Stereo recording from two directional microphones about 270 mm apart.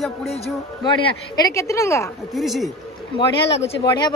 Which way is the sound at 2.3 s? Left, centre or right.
Centre.